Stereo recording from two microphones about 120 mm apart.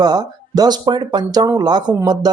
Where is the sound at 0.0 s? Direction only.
35° right (ahead or behind).